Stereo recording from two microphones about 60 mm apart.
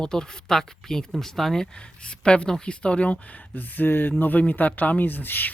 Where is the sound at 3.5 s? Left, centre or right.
Left.